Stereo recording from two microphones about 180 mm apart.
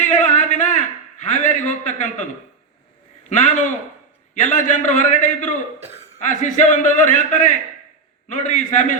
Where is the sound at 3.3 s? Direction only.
40° left (ahead or behind).